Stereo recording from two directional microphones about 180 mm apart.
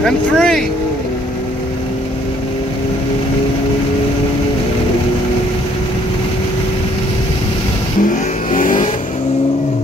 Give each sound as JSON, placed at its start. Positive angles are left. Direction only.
{"t": 0.0, "sound": "speech", "side_deg": 5}
{"t": 8.0, "sound": "vehicle", "side_deg": 45}